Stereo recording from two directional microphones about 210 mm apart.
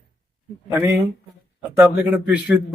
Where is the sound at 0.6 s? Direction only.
15° right (ahead or behind).